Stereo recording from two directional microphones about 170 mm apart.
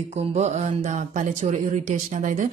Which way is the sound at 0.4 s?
50° right (ahead or behind).